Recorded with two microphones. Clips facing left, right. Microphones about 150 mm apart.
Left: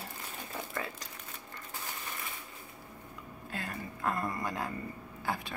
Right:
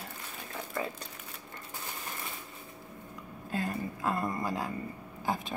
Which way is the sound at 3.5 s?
20° right (ahead or behind).